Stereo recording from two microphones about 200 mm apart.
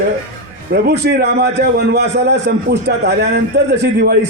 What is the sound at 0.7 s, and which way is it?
A man's voice, 55° right (ahead or behind).